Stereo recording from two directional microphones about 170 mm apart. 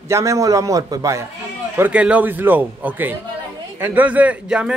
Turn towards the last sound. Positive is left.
turn(degrees=-5)  # may be behind; listen again after turning